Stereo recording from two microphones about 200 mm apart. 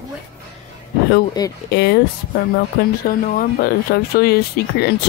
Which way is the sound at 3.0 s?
50° left (ahead or behind).